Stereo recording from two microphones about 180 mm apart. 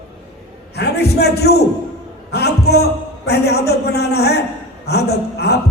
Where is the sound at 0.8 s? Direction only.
65° left (ahead or behind).